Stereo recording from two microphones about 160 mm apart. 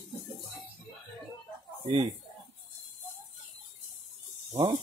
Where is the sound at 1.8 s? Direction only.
35° right (ahead or behind).